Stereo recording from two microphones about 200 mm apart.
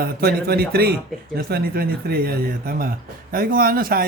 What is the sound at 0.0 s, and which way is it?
Speech, 50° right (ahead or behind).